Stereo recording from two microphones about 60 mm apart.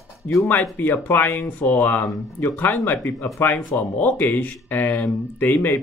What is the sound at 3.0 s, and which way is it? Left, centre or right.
Speech, left.